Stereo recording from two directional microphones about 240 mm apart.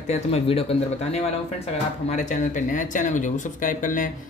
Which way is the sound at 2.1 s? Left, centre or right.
Left.